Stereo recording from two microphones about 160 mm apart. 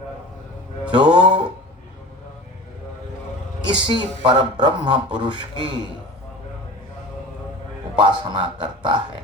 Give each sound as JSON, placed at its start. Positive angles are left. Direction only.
{"t": 0.9, "sound": "speech", "side_deg": -30}
{"t": 3.7, "sound": "speech", "side_deg": -30}
{"t": 8.0, "sound": "speech", "side_deg": -25}